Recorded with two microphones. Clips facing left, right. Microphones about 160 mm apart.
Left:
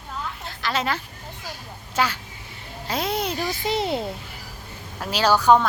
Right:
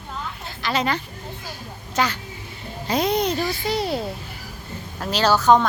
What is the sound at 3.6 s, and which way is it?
Speech, 20° left (ahead or behind).